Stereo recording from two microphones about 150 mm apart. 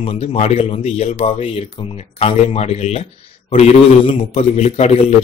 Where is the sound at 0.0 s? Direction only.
40° left (ahead or behind).